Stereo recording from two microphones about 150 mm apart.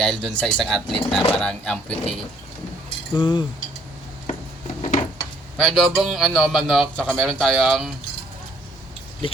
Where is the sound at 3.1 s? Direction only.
30° left (ahead or behind).